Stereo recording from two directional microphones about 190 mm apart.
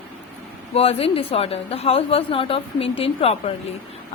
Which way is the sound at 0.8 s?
30° left (ahead or behind).